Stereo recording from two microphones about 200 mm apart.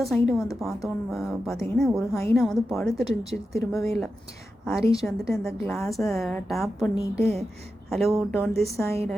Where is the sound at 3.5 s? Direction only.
15° left (ahead or behind).